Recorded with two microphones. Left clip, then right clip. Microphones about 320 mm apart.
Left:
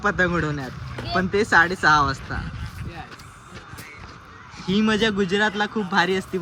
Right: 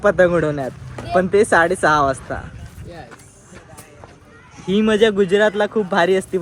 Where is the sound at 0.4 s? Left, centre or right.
Right.